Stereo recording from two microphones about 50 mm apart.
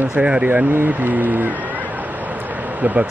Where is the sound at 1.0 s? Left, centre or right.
Right.